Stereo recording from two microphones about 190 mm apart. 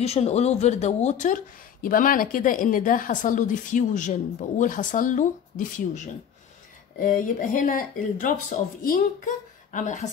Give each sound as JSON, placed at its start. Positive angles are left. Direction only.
{"t": 0.0, "sound": "speech", "side_deg": 35}